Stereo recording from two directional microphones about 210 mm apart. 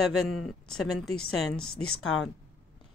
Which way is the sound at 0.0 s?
Centre (ahead or behind).